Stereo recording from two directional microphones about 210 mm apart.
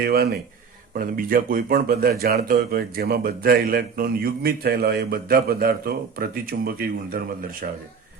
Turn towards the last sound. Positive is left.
turn(degrees=-45)  # may be behind; listen again after turning